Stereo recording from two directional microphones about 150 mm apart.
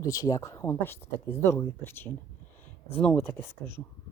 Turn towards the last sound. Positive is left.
turn(degrees=15)  # may be behind; listen again after turning